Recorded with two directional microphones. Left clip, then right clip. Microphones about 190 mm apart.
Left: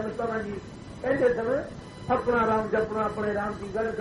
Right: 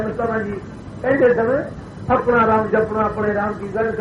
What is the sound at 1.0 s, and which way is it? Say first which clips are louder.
A man's voice: right 9 dB; 35° left (ahead or behind).